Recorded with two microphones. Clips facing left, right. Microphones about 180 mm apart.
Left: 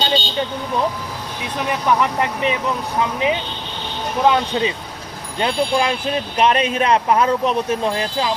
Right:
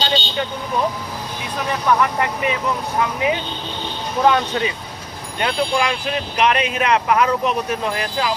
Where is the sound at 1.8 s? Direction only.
20° left (ahead or behind).